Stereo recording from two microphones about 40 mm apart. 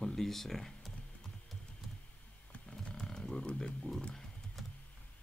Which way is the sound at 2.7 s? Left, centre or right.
Left.